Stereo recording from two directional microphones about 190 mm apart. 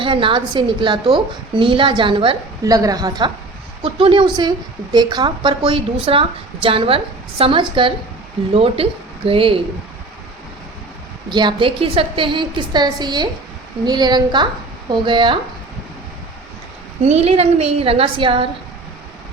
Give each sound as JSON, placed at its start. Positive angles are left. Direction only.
{"t": 0.0, "sound": "a woman's voice", "side_deg": -25}
{"t": 11.3, "sound": "a woman's voice", "side_deg": -25}
{"t": 17.0, "sound": "a woman's voice", "side_deg": -35}